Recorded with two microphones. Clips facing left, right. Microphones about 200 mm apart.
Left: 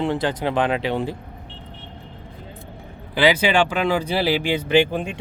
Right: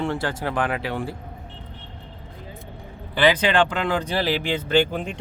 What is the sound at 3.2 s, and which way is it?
Speech, 10° left (ahead or behind).